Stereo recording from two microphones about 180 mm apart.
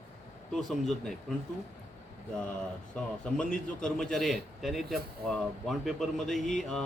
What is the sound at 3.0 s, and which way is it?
A man's voice, 5° left (ahead or behind).